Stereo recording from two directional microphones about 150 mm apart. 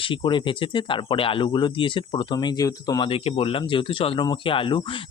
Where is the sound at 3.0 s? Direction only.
40° left (ahead or behind).